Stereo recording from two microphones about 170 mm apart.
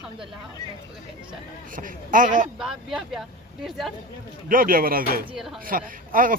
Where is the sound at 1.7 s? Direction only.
55° right (ahead or behind).